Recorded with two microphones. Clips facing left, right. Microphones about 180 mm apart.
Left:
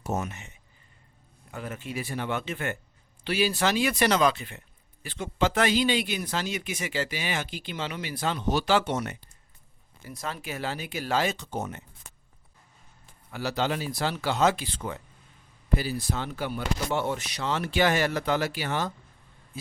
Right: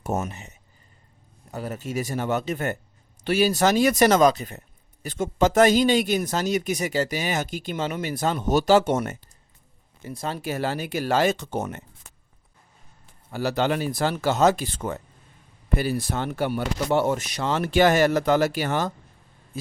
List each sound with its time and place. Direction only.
0.0 s speech: 50° right (ahead or behind)
0.3 s a man's voice: 35° right (ahead or behind)
10.0 s a man's voice: 30° right (ahead or behind); by 11.8 s 55° right (ahead or behind)
13.5 s a man's voice: 55° right (ahead or behind)
15.8 s a man's voice: 55° right (ahead or behind)